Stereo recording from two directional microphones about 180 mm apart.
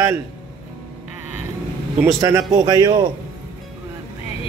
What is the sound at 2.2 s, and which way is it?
Speech, 20° right (ahead or behind).